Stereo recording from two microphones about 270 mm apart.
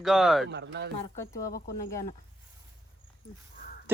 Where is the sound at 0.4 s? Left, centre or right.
Right.